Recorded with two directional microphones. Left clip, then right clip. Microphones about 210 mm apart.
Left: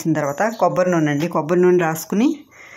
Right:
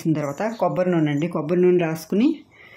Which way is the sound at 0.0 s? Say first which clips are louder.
Left 5 dB; centre (ahead or behind).